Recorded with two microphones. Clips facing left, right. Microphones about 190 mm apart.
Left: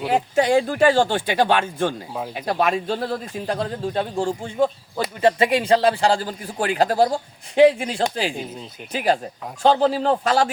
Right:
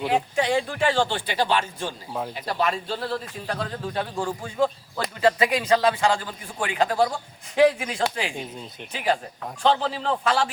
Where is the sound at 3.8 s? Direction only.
25° left (ahead or behind).